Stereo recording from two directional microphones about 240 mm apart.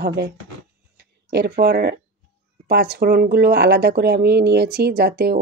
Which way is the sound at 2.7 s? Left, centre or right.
Right.